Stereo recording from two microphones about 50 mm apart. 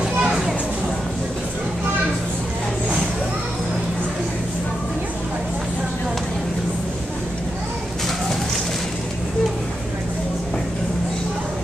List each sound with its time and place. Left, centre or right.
0.0 s children playing: centre